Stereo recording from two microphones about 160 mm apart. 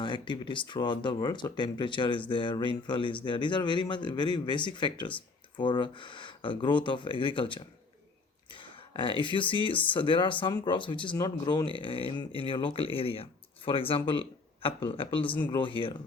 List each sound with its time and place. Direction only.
0.0 s speech: 30° left (ahead or behind)
8.4 s a sound: 30° left (ahead or behind)
9.2 s speech: 30° left (ahead or behind)